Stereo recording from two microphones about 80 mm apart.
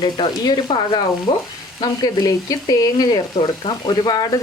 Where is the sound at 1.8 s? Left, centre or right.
Left.